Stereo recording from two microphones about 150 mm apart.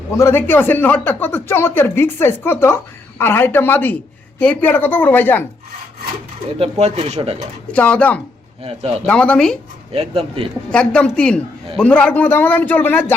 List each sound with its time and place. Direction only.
0.1 s speech: 15° left (ahead or behind)
6.6 s speech: 45° right (ahead or behind)
7.7 s speech: 10° left (ahead or behind)
8.6 s speech: 45° right (ahead or behind)
9.0 s speech: 5° left (ahead or behind)
9.9 s speech: 40° right (ahead or behind)
10.7 s speech: 5° left (ahead or behind)